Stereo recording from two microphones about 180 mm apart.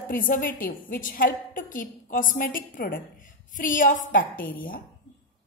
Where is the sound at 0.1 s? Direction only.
50° left (ahead or behind).